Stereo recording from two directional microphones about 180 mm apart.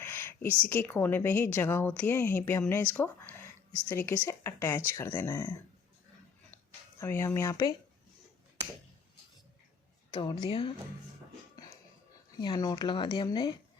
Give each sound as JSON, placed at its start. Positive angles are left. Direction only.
{"t": 0.0, "sound": "a sound", "side_deg": 15}
{"t": 0.6, "sound": "a woman's voice", "side_deg": 10}
{"t": 7.0, "sound": "a woman's voice", "side_deg": 15}
{"t": 10.1, "sound": "speech", "side_deg": 25}
{"t": 12.4, "sound": "speech", "side_deg": 20}